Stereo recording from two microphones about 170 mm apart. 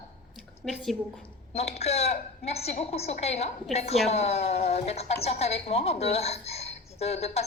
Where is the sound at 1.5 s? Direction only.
40° left (ahead or behind).